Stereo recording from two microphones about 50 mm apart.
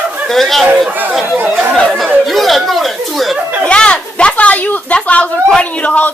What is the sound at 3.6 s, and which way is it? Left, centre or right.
Speech, left.